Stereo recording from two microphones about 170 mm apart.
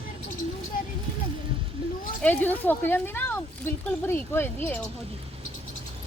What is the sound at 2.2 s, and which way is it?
Speech, 10° left (ahead or behind).